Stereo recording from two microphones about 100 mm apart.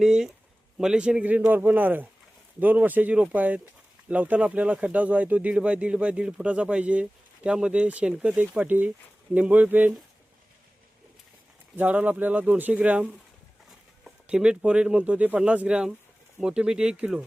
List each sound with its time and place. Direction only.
0.0 s speech: 5° right (ahead or behind)
11.8 s speech: 15° right (ahead or behind)